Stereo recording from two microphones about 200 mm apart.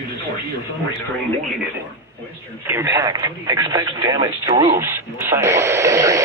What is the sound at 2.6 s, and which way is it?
Speech, 15° right (ahead or behind).